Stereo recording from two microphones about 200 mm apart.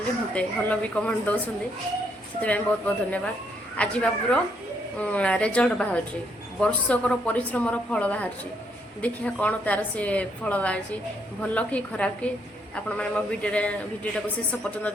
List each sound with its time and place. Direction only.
0.3 s a woman's voice: 5° left (ahead or behind)
2.4 s a woman's voice: 5° left (ahead or behind)